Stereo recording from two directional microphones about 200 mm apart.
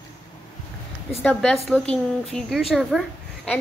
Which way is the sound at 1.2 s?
5° left (ahead or behind).